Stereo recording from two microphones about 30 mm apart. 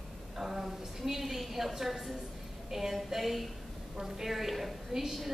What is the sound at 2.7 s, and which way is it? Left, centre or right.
A woman's voice, centre.